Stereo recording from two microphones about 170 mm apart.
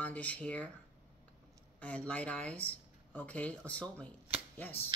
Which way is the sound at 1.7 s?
10° left (ahead or behind).